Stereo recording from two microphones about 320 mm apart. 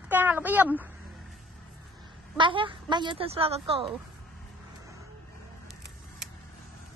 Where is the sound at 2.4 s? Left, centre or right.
Centre.